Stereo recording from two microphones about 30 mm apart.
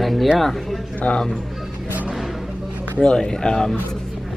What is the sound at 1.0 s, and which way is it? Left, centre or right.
Speech, left.